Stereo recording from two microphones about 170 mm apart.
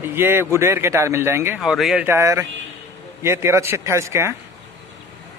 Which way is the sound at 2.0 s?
15° right (ahead or behind).